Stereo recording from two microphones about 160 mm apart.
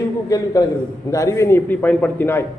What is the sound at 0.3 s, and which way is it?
A man's voice, 20° left (ahead or behind).